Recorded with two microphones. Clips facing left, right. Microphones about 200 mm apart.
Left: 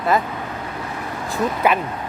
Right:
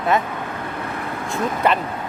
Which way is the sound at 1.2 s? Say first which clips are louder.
Left 1 dB; 5° left (ahead or behind).